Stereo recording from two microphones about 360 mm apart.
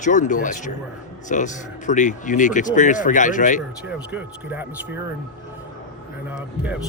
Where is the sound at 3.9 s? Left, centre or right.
Centre.